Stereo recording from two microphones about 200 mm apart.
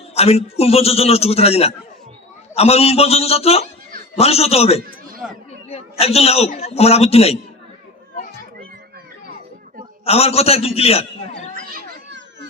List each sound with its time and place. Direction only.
0.1 s a man's voice: 30° left (ahead or behind)
10.0 s a man's voice: 30° left (ahead or behind)
12.0 s children playing: 60° right (ahead or behind)